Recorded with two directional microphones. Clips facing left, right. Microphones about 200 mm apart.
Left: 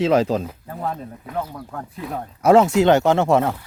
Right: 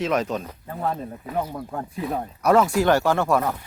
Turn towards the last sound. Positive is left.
turn(degrees=25)  # may be behind; listen again after turning